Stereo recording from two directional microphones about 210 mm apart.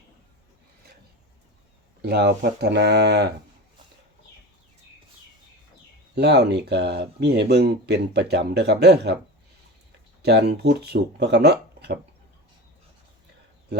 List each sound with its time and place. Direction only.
2.0 s speech: 50° right (ahead or behind)
6.1 s speech: 50° right (ahead or behind)
10.2 s speech: 50° right (ahead or behind)